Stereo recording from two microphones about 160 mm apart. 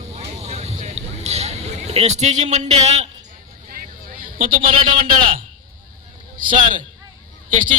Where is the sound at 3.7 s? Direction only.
60° right (ahead or behind).